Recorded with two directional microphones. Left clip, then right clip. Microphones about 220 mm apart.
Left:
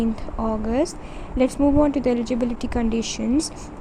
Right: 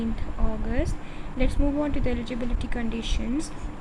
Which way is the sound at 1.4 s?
25° left (ahead or behind).